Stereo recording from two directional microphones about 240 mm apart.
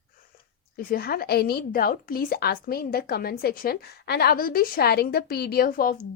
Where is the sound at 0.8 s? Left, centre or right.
Left.